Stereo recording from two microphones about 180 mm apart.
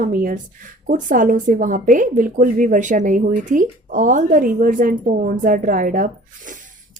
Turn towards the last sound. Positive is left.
turn(degrees=-50)  # may be behind; listen again after turning